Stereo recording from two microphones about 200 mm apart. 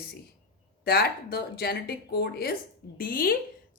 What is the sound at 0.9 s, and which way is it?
A woman's voice, 50° left (ahead or behind).